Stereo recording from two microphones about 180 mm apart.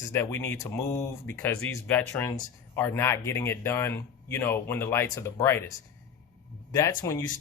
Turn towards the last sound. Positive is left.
turn(degrees=15)  # may be behind; listen again after turning